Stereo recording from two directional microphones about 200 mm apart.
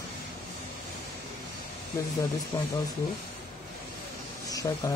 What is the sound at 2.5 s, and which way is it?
Speech, 10° left (ahead or behind).